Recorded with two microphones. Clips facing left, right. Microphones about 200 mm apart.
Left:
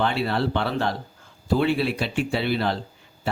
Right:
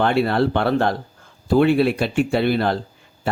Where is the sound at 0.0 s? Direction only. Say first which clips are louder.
Right 6 dB; 55° right (ahead or behind).